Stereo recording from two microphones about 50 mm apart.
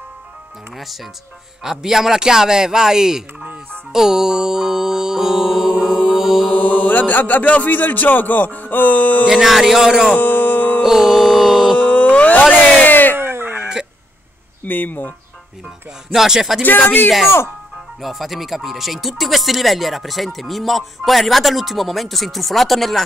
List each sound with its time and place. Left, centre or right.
1.6 s speech: centre
3.9 s music: centre
6.6 s chant: left
7.7 s speech: left
9.3 s speech: centre
10.2 s music: left
10.8 s music: centre
11.8 s a sound: left
13.2 s a sound: right
14.6 s speech: left
16.1 s speech: centre
16.6 s speech: left
18.0 s speech: centre